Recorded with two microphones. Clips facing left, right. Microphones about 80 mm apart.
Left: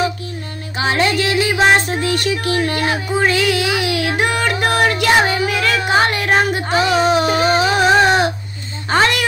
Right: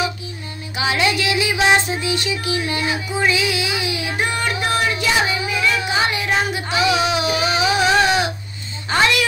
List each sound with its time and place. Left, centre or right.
0.7 s music: left
4.6 s child singing: left
8.9 s a sound: left